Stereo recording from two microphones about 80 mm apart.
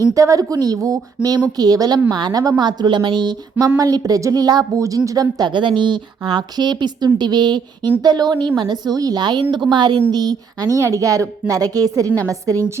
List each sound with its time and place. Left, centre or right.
0.1 s a woman's voice: right
2.6 s speech: right
3.8 s a woman's voice: right
5.5 s a woman's voice: right
10.1 s a woman's voice: right
10.8 s a woman's voice: right